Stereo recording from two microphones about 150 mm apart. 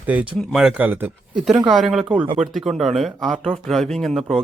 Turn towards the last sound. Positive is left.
turn(degrees=0)  # may be behind; listen again after turning